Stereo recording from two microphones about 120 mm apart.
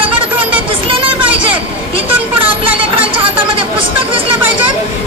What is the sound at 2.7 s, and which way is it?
Chatter, 45° right (ahead or behind).